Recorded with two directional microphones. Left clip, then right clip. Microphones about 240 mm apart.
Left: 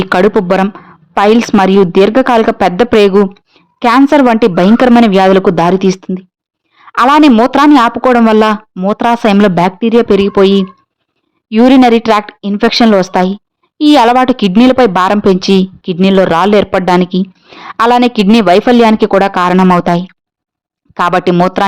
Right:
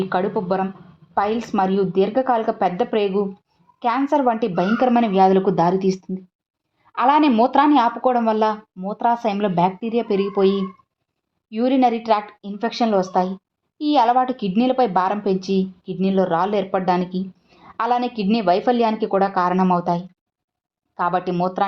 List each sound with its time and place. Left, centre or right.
0.0 s speech: left